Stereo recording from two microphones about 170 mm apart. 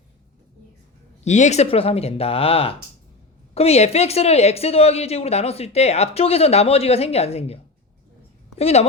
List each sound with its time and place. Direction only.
1.2 s a woman's voice: 45° left (ahead or behind)